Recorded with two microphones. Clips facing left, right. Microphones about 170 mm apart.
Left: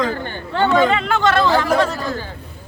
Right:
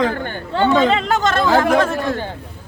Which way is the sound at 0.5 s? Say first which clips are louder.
Right 1 dB; 25° right (ahead or behind).